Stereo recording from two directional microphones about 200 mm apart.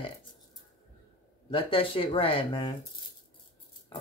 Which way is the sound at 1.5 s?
25° left (ahead or behind).